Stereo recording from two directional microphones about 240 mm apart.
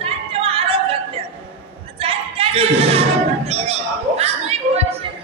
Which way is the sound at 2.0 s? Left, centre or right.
Right.